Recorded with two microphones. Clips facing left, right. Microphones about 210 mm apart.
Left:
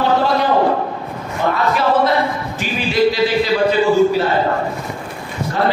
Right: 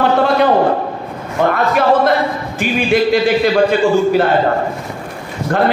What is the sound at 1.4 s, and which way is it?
Speech, 55° right (ahead or behind).